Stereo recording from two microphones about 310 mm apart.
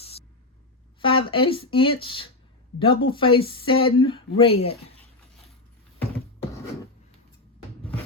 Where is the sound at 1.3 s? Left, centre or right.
Centre.